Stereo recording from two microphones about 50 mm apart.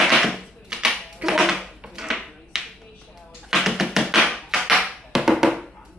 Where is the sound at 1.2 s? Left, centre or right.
Centre.